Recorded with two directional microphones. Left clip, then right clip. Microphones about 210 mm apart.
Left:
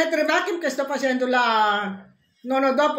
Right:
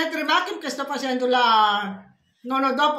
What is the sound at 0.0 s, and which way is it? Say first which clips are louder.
A woman's voice: left 1 dB; 15° right (ahead or behind).